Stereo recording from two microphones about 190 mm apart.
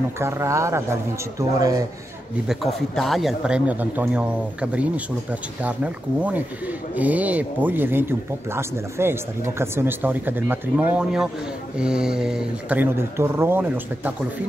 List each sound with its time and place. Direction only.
0.2 s speech: 15° right (ahead or behind)
2.4 s speech: centre (ahead or behind)
7.0 s speech: 10° right (ahead or behind)